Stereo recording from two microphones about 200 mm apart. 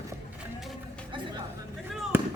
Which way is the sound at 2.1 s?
10° right (ahead or behind).